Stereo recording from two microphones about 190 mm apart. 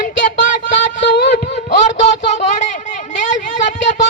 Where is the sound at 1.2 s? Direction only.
60° left (ahead or behind).